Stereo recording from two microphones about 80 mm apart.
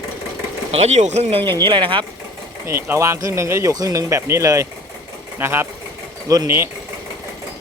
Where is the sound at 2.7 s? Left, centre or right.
Right.